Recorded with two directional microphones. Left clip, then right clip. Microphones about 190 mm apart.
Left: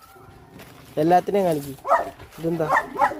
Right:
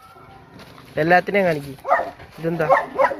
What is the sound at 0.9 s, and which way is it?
Speech, 20° left (ahead or behind).